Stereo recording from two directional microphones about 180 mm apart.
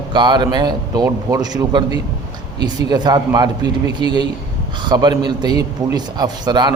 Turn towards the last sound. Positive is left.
turn(degrees=-25)  # may be behind; listen again after turning